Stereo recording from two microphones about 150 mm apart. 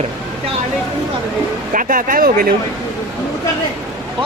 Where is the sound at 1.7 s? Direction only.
65° right (ahead or behind).